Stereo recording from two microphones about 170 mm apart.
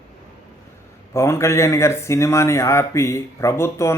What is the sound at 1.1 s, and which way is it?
Speech, 15° left (ahead or behind).